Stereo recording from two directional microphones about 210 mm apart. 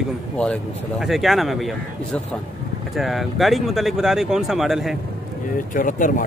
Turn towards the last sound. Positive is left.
turn(degrees=40)  # may be behind; listen again after turning